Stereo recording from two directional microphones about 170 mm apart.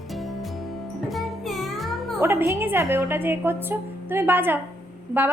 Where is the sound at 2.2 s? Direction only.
15° right (ahead or behind).